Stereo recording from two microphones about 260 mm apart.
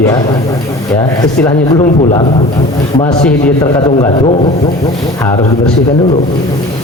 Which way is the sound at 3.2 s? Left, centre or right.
Centre.